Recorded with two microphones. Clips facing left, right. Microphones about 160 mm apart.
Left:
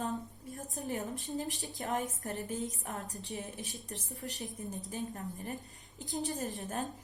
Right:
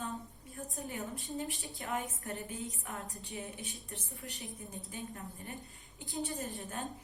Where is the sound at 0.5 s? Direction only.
40° left (ahead or behind).